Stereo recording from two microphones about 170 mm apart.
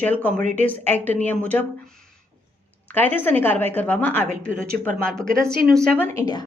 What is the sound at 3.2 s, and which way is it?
A woman's voice, 10° left (ahead or behind).